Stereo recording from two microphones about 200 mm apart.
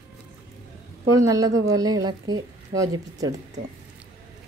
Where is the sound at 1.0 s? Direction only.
15° right (ahead or behind).